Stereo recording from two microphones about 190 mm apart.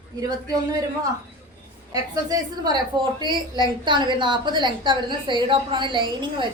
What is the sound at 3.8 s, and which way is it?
A woman's voice, 25° right (ahead or behind).